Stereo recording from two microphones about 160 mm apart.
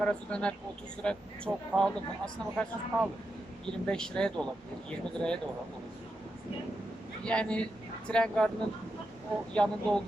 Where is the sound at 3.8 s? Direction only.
5° left (ahead or behind).